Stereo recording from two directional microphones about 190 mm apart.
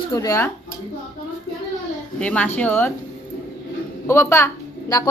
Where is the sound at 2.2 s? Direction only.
5° left (ahead or behind).